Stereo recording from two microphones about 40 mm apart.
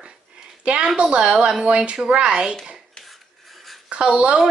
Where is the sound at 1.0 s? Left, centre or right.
Centre.